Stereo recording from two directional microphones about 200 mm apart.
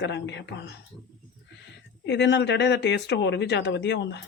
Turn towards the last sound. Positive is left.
turn(degrees=60)  # may be behind; listen again after turning